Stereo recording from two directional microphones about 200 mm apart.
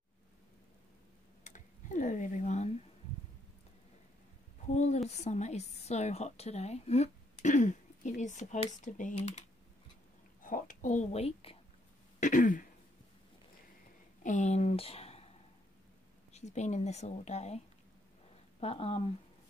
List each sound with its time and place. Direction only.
1.4 s computer keyboard: 40° left (ahead or behind)
4.6 s a woman's voice: 35° left (ahead or behind)
10.4 s a woman's voice: 40° left (ahead or behind)
14.2 s speech: 35° left (ahead or behind)
16.3 s a woman's voice: 35° left (ahead or behind)
18.6 s speech: 30° left (ahead or behind)